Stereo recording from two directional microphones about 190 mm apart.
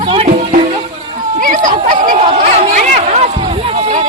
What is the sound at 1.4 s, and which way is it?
Chatter, 45° right (ahead or behind).